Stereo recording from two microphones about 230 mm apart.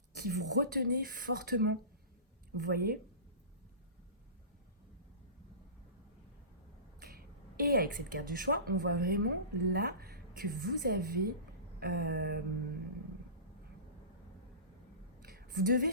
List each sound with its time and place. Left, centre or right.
0.1 s a woman's voice: right
7.5 s a woman's voice: right
15.2 s a sound: right